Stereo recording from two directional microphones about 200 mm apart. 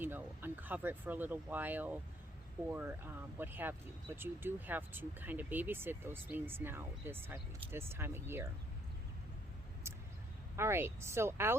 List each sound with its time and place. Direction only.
0.0 s speech: 10° right (ahead or behind)
10.6 s speech: 10° right (ahead or behind)